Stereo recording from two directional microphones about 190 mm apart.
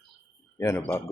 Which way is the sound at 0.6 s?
10° left (ahead or behind).